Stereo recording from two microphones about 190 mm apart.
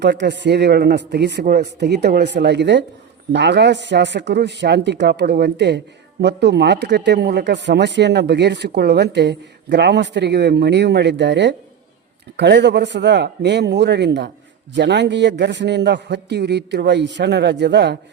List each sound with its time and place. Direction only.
0.0 s speech: 65° right (ahead or behind)